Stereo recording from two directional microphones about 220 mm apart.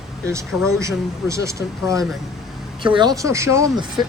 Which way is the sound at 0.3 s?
10° right (ahead or behind).